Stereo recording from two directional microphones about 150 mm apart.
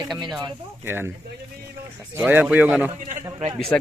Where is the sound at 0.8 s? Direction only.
15° right (ahead or behind).